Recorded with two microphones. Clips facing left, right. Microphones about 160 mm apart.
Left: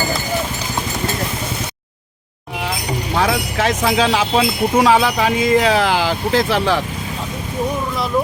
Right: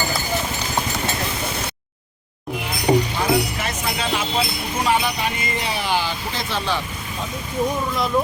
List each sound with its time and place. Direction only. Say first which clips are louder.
3.2 s speech: left 3 dB; 90° left